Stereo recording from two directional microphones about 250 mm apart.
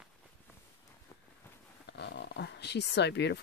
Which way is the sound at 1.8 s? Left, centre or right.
Left.